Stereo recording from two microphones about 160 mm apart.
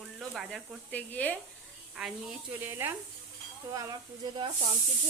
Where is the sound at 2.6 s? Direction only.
15° right (ahead or behind).